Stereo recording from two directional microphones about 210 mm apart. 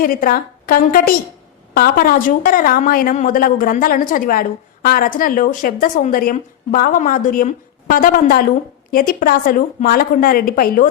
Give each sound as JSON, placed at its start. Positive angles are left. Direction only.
{"t": 0.0, "sound": "a woman's voice", "side_deg": 40}